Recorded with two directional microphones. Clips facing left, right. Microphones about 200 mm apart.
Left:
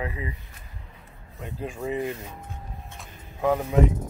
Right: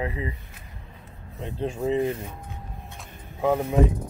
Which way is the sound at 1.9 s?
25° right (ahead or behind).